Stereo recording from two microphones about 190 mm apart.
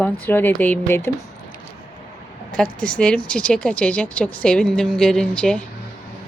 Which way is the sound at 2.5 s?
5° left (ahead or behind).